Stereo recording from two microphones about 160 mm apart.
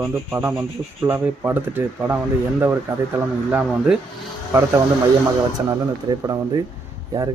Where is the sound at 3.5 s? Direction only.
10° right (ahead or behind).